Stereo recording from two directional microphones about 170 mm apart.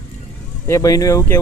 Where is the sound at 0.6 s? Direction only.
20° left (ahead or behind).